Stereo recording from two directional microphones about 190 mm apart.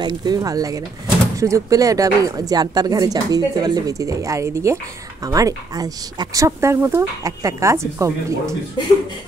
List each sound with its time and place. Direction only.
0.0 s speech: 20° right (ahead or behind)